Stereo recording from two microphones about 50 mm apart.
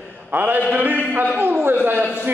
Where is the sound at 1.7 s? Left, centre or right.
Right.